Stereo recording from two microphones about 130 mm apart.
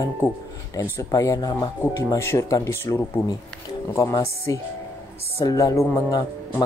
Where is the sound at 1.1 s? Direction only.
30° left (ahead or behind).